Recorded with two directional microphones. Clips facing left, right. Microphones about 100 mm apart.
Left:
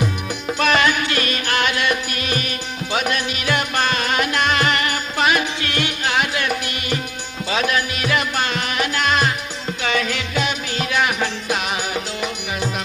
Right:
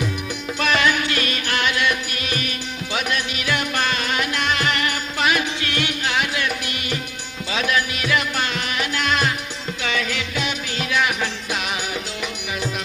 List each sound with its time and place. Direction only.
0.6 s music: 45° left (ahead or behind)